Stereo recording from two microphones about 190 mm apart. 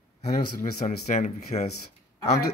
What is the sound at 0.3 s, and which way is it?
Speech, 40° left (ahead or behind).